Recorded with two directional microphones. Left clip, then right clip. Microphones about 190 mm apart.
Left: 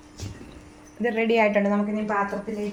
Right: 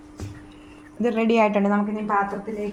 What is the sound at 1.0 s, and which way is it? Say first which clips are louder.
Speech: right 1 dB; 50° right (ahead or behind).